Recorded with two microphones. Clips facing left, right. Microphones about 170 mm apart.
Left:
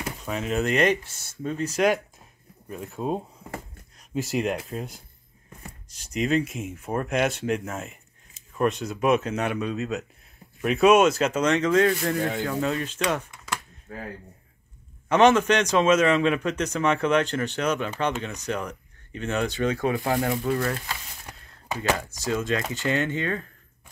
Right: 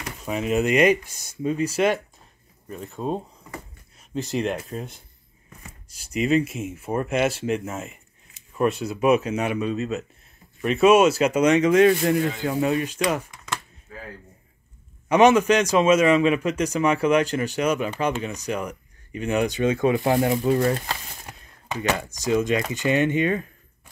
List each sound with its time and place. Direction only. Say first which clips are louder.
0.2 s a man's voice: right 4 dB; 5° right (ahead or behind)
2.7 s a man's voice: right 1 dB; 5° left (ahead or behind); by 13.0 s 10° right (ahead or behind)
13.0 s speech: right 2 dB; centre (ahead or behind)
13.9 s speech: left 3 dB; 50° left (ahead or behind)
15.0 s a man's voice: right 2 dB; 10° right (ahead or behind)
21.3 s a sound: even; 15° right (ahead or behind)
22.0 s a man's voice: right 5 dB; 15° right (ahead or behind)